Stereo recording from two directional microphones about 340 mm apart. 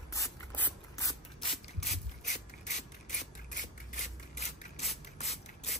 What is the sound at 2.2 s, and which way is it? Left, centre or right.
Rub, left.